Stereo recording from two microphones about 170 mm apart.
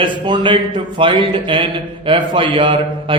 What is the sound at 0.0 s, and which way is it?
A man's voice, 30° right (ahead or behind).